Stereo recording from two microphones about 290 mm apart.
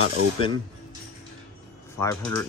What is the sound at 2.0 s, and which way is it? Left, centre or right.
Speech, centre.